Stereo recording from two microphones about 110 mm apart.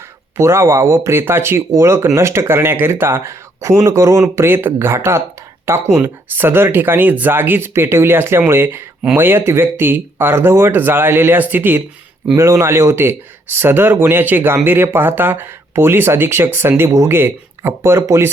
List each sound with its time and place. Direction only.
0.3 s speech: 25° right (ahead or behind)